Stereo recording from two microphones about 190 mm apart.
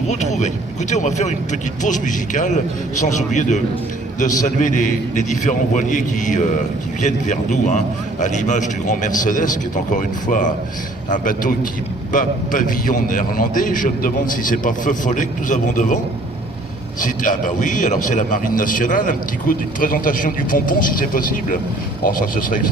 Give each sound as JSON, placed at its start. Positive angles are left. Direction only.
{"t": 0.1, "sound": "a man's voice", "side_deg": 35}
{"t": 17.0, "sound": "a man's voice", "side_deg": 45}